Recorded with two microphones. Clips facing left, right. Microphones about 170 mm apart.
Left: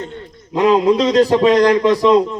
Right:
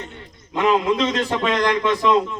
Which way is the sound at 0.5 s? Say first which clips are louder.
Left 6 dB; 35° left (ahead or behind).